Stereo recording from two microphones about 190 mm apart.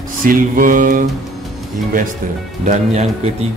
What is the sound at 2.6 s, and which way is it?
Speech, 40° right (ahead or behind).